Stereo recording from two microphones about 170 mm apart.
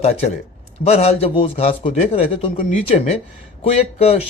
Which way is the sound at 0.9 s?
35° left (ahead or behind).